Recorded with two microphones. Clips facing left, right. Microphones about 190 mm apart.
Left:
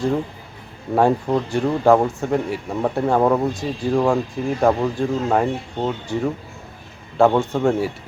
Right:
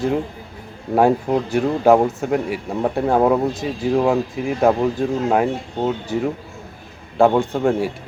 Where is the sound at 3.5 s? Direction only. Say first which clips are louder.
Right 1 dB; 20° right (ahead or behind).